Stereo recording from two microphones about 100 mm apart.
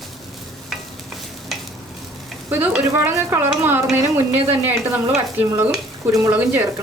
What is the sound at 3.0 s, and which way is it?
Stir, 25° right (ahead or behind).